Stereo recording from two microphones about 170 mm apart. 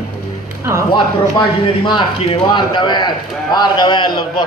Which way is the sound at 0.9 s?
25° left (ahead or behind).